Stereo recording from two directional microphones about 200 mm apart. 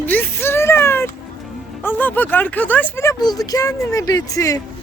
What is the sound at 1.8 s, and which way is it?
A man's voice, 10° left (ahead or behind).